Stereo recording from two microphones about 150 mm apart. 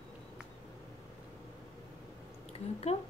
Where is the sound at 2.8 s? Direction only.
45° left (ahead or behind).